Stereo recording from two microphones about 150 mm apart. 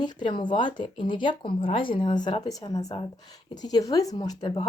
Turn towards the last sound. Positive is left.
turn(degrees=30)  # may be behind; listen again after turning